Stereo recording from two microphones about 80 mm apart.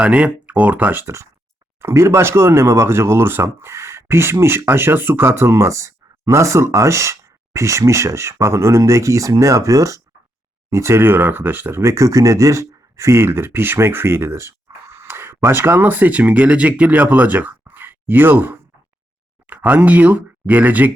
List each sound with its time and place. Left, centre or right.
0.0 s speech: centre
1.0 s speech: right